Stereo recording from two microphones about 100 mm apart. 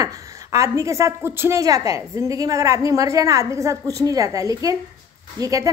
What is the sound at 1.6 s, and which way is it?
A woman's voice, 35° right (ahead or behind).